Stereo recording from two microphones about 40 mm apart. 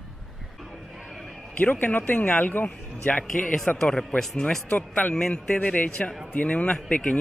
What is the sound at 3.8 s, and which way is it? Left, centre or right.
Speech, centre.